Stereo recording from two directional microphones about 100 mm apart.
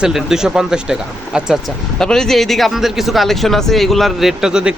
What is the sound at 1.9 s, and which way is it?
Speech, 5° left (ahead or behind).